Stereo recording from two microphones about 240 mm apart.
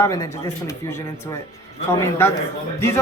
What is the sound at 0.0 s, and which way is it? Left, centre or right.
Speech, centre.